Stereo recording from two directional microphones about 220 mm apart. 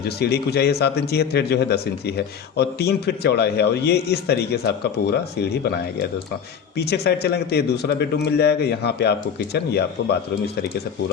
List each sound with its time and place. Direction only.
0.2 s a man's voice: 45° left (ahead or behind)